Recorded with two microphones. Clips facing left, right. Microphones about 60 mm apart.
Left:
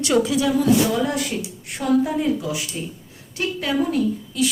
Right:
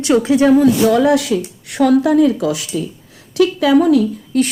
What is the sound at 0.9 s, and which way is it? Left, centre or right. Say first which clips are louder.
A woman's voice: right 10 dB; right.